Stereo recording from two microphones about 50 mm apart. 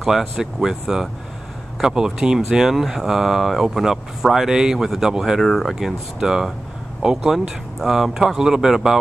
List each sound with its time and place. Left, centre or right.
0.0 s speech: centre
5.4 s speech: centre